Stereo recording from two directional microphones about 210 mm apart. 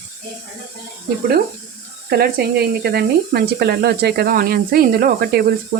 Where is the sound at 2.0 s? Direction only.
50° right (ahead or behind).